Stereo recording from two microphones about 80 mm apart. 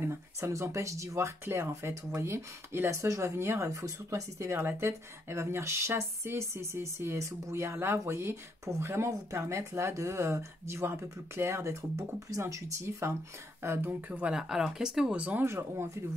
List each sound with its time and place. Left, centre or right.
0.0 s speech: right; by 14.3 s centre
14.3 s speech: centre
15.1 s speech: centre
15.4 s speech: right